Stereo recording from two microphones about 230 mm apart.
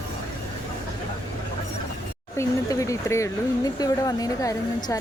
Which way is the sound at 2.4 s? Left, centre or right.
Centre.